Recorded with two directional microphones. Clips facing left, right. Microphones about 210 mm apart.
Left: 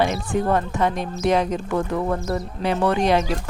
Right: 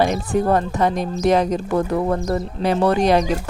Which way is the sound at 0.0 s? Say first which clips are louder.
Right 3 dB; 40° right (ahead or behind).